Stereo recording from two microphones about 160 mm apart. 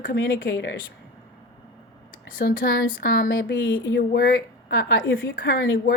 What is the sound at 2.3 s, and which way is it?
A woman's voice, 65° left (ahead or behind).